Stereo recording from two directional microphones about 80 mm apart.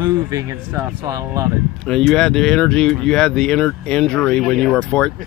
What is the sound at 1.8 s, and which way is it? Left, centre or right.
Speech, centre.